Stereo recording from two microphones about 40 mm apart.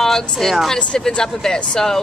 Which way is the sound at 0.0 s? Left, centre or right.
Centre.